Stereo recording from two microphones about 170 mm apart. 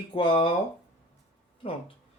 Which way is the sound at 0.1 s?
30° left (ahead or behind).